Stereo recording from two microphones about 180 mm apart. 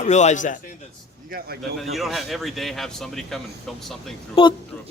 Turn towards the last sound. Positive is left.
turn(degrees=10)  # may be behind; listen again after turning